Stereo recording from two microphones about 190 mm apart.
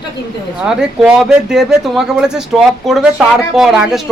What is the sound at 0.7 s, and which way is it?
Speech, 5° right (ahead or behind).